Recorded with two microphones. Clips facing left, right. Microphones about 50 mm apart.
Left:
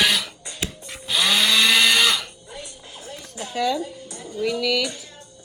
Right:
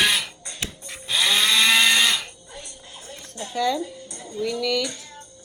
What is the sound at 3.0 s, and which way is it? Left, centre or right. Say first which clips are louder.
Music: left 2 dB; right.